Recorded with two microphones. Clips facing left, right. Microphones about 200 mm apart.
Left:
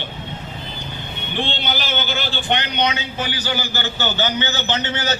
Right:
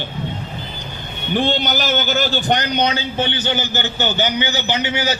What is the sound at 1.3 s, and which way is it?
A man's voice, 45° right (ahead or behind).